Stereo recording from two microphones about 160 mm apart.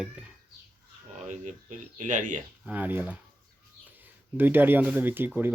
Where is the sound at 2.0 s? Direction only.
55° right (ahead or behind).